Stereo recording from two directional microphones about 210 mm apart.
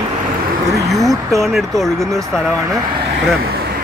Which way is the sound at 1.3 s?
Centre (ahead or behind).